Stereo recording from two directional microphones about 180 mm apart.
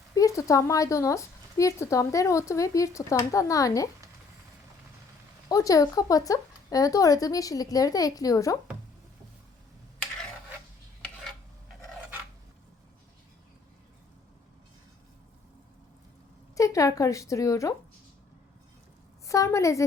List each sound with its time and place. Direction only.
0.1 s a woman's voice: 20° left (ahead or behind)
5.5 s speech: 20° left (ahead or behind)
16.6 s a woman's voice: 20° left (ahead or behind)
19.3 s a woman's voice: 15° left (ahead or behind)